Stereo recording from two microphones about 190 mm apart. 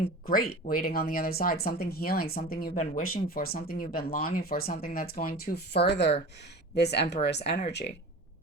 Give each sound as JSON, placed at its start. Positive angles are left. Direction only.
{"t": 0.3, "sound": "speech", "side_deg": 50}